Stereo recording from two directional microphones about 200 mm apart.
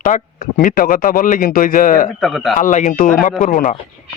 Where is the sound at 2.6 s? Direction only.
40° left (ahead or behind).